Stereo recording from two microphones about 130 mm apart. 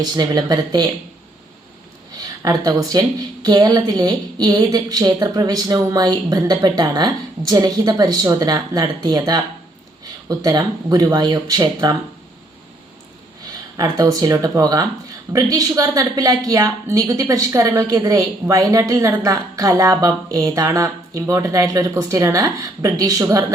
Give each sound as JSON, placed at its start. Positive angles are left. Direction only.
{"t": 0.0, "sound": "speech", "side_deg": -30}
{"t": 2.1, "sound": "a woman's voice", "side_deg": -30}
{"t": 13.9, "sound": "a woman's voice", "side_deg": -30}